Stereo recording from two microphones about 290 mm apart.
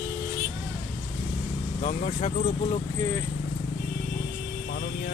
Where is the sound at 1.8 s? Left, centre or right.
Left.